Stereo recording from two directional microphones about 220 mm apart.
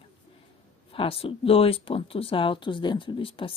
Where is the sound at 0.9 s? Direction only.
25° left (ahead or behind).